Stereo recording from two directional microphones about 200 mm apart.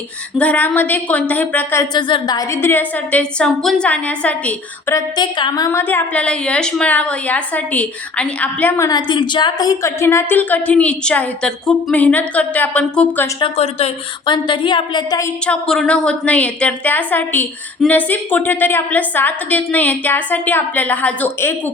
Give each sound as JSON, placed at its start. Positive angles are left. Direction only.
{"t": 0.3, "sound": "speech", "side_deg": 5}
{"t": 13.4, "sound": "a woman's voice", "side_deg": 30}
{"t": 15.4, "sound": "speech", "side_deg": 0}